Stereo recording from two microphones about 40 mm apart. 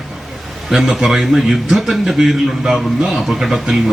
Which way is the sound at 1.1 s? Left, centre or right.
Centre.